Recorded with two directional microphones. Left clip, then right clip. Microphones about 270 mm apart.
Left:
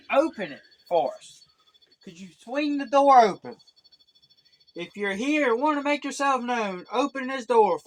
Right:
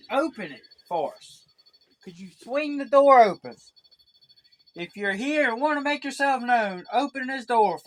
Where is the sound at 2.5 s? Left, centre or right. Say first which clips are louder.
Right 2 dB; right.